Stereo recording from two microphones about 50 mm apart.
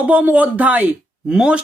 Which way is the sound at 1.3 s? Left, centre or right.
Centre.